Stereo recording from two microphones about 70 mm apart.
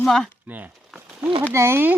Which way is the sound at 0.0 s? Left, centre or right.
Centre.